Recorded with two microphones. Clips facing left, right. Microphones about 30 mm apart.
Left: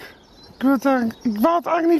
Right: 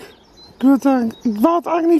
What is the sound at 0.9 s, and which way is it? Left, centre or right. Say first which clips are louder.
Speech: right 3 dB; centre.